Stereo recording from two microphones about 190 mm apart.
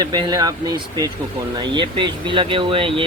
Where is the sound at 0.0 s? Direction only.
20° right (ahead or behind).